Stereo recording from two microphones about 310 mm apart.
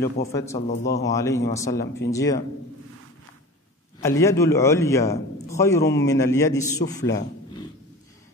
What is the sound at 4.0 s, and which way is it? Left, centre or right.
A man's voice, centre.